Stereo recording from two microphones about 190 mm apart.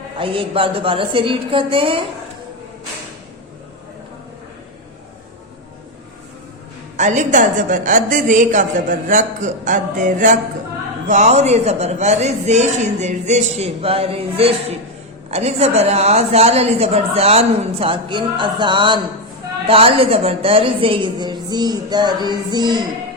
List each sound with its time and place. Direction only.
0.2 s a woman's voice: 30° right (ahead or behind)
6.9 s a woman's voice: 40° right (ahead or behind); by 22.8 s 20° right (ahead or behind)